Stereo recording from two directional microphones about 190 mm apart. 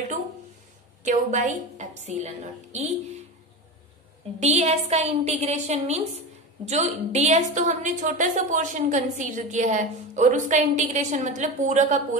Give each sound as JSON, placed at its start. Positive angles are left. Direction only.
{"t": 1.0, "sound": "a woman's voice", "side_deg": -40}
{"t": 4.4, "sound": "a woman's voice", "side_deg": -35}